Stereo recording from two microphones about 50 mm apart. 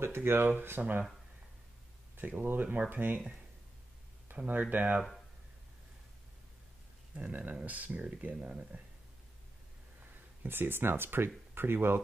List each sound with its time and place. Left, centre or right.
0.0 s speech: right
2.1 s speech: right
4.5 s speech: right
7.2 s speech: right
10.4 s speech: right